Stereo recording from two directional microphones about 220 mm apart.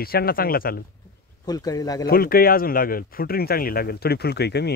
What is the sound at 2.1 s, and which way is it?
Speech, 40° left (ahead or behind).